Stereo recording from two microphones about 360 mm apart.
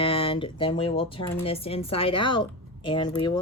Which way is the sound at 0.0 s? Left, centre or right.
Centre.